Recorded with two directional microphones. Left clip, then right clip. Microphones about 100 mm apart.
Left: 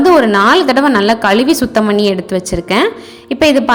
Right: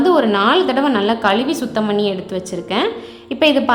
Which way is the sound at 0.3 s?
50° left (ahead or behind).